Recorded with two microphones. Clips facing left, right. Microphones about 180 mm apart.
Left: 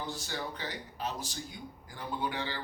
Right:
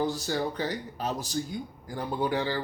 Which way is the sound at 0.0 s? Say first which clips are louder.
Right 10 dB; 40° right (ahead or behind).